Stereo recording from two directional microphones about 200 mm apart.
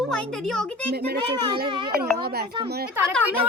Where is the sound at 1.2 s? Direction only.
20° right (ahead or behind).